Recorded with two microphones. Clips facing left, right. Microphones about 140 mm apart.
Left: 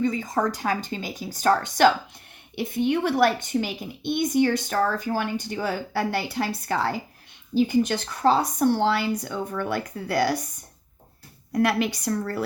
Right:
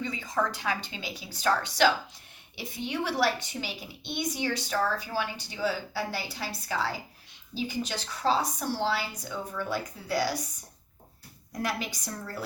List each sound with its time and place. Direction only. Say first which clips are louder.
0.0 s a woman's voice: left 6 dB; 45° left (ahead or behind)
11.5 s a woman's voice: left 10 dB; 65° left (ahead or behind)